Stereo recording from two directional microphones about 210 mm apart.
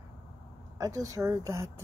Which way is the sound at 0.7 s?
15° right (ahead or behind).